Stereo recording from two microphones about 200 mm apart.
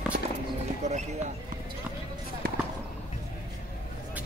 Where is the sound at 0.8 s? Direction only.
35° right (ahead or behind).